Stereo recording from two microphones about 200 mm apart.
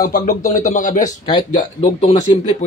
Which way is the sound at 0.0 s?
45° left (ahead or behind).